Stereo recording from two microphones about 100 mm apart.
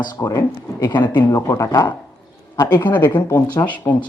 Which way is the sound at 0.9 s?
50° left (ahead or behind).